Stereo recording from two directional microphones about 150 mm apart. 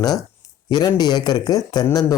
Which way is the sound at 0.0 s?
25° left (ahead or behind).